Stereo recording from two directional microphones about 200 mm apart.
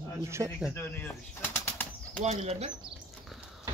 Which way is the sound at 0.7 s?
10° left (ahead or behind).